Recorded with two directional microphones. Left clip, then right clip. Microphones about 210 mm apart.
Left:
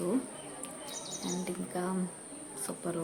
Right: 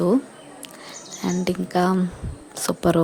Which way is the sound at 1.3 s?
40° right (ahead or behind).